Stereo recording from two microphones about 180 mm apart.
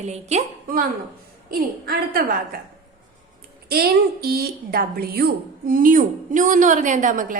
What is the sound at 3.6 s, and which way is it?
A woman's voice, 60° right (ahead or behind).